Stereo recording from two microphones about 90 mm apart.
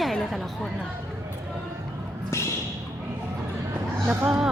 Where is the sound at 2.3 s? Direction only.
30° left (ahead or behind).